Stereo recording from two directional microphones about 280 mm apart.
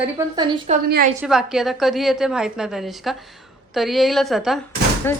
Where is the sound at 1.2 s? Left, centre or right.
Centre.